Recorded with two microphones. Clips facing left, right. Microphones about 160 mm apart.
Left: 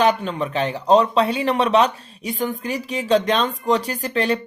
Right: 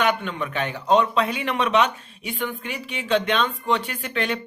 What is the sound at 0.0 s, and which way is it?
Speech, 35° left (ahead or behind).